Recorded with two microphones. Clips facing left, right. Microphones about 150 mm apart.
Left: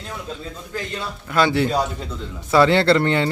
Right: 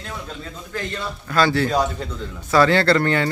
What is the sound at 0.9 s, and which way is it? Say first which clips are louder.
Speech: even; 20° left (ahead or behind).